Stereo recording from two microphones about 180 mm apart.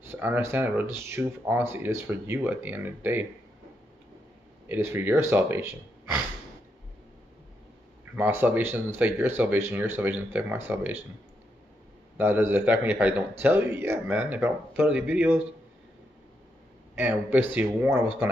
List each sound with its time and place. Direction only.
0.0 s speech: 10° right (ahead or behind)
4.6 s speech: 15° right (ahead or behind)
8.0 s speech: 10° right (ahead or behind)
12.2 s speech: 10° right (ahead or behind)
16.9 s speech: 10° right (ahead or behind)